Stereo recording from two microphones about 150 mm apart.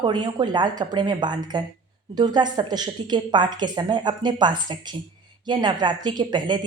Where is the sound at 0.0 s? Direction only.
30° right (ahead or behind).